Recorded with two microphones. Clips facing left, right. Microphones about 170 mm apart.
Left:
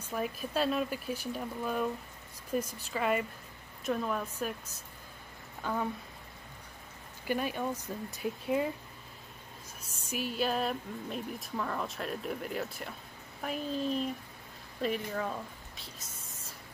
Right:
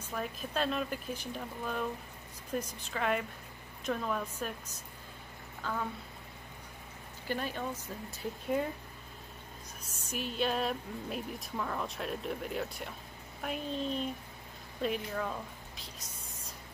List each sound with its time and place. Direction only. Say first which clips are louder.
0.0 s speech: left 3 dB; 10° left (ahead or behind)
5.6 s speech: left 3 dB; 15° left (ahead or behind)
7.2 s speech: left 3 dB; 10° left (ahead or behind)
10.0 s speech: left 1 dB; 5° left (ahead or behind)